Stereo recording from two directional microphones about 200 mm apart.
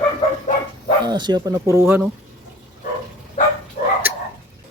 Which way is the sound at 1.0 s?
20° right (ahead or behind).